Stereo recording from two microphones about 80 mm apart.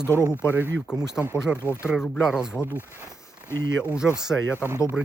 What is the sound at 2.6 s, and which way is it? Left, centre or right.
Speech, left.